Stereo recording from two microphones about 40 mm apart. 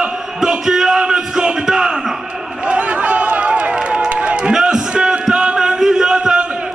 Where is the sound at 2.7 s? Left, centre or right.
Right.